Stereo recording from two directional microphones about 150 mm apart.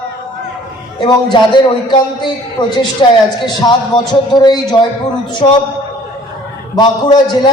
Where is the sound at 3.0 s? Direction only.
35° left (ahead or behind).